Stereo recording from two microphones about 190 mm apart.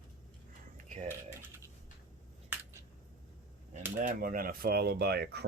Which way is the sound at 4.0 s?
45° right (ahead or behind).